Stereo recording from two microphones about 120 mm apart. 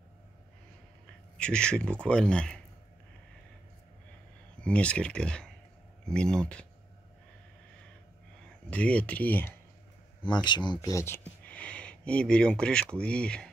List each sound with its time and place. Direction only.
1.4 s speech: 10° left (ahead or behind)
4.6 s speech: 10° left (ahead or behind)
8.6 s speech: 10° left (ahead or behind)
10.2 s speech: 40° left (ahead or behind)
10.9 s speech: 25° left (ahead or behind)
11.4 s speech: 10° left (ahead or behind)